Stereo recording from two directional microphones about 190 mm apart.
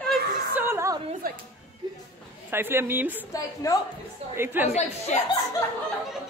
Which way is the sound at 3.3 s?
20° left (ahead or behind).